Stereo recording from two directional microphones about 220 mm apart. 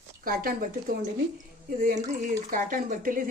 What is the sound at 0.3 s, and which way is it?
A woman's voice, 40° right (ahead or behind).